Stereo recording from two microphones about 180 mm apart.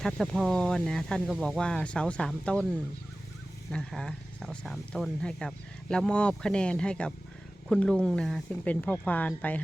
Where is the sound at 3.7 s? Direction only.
5° left (ahead or behind).